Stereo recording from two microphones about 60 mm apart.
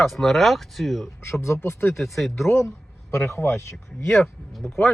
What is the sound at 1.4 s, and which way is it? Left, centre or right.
Speech, left.